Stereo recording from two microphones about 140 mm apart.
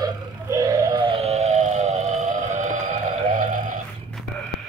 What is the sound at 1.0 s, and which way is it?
Music, 40° right (ahead or behind).